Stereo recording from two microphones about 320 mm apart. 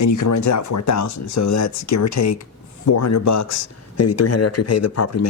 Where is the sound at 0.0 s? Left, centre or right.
Left.